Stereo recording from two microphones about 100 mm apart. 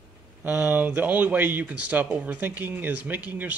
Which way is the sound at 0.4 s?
15° right (ahead or behind).